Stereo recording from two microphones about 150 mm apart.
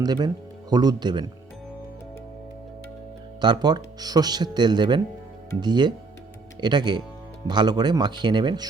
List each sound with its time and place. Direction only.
0.0 s speech: 25° right (ahead or behind)
3.4 s speech: 30° right (ahead or behind)